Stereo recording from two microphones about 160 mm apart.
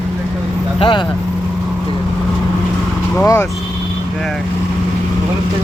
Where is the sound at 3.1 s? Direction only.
15° left (ahead or behind).